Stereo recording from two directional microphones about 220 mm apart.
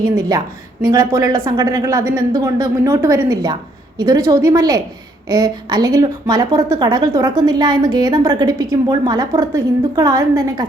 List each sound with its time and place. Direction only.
0.0 s speech: 15° right (ahead or behind)